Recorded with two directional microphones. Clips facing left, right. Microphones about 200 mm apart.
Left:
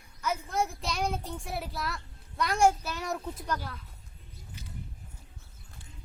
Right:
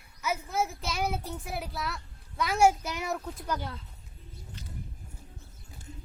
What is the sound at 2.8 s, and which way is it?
Speech, 15° right (ahead or behind).